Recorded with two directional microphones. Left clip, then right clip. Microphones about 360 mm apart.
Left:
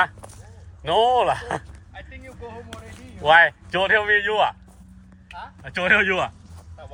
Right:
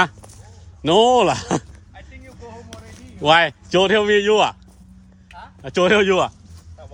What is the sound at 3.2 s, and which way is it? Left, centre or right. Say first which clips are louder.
A man's voice: even; centre.